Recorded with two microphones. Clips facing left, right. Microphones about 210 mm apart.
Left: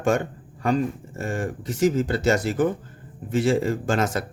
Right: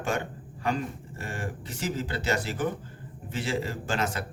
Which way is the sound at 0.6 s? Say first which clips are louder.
Left 7 dB; 45° left (ahead or behind).